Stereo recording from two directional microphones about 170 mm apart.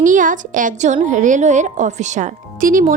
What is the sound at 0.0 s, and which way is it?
A woman's voice, 50° right (ahead or behind).